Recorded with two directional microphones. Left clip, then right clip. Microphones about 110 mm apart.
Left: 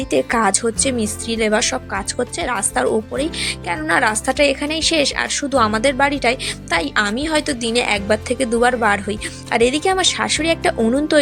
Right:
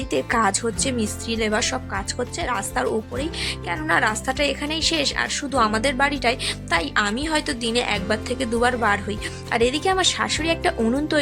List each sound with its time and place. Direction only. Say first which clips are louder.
0.1 s speech: left 4 dB; 30° left (ahead or behind)